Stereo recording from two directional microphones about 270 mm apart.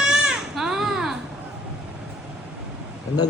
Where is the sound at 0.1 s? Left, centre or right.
Centre.